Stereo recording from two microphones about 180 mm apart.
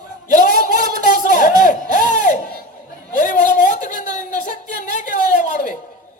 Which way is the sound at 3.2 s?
45° left (ahead or behind).